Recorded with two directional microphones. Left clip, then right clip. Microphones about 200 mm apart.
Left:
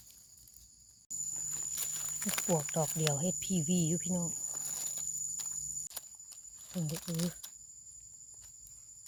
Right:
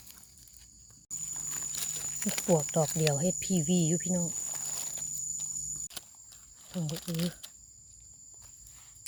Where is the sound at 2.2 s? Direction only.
5° left (ahead or behind).